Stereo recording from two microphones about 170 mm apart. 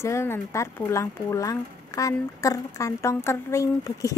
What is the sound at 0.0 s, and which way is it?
A woman's voice, 15° left (ahead or behind).